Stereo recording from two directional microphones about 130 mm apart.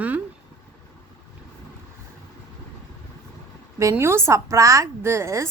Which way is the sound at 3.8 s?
20° right (ahead or behind).